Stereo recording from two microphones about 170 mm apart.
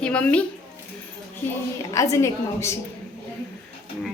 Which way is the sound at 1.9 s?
20° left (ahead or behind).